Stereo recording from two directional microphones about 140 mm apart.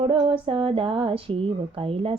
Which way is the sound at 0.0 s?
40° right (ahead or behind).